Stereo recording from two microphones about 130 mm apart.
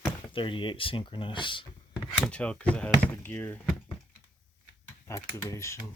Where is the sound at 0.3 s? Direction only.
40° left (ahead or behind).